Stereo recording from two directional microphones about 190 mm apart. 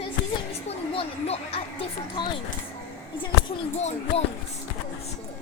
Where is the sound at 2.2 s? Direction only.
20° left (ahead or behind).